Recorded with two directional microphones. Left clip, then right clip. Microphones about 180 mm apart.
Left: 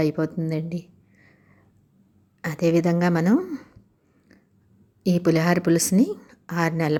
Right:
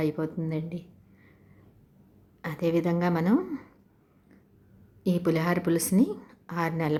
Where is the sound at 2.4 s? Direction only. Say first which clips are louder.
Left 6 dB; 25° left (ahead or behind).